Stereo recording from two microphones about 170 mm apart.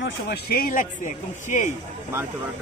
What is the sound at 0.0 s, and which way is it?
Speech, 70° left (ahead or behind).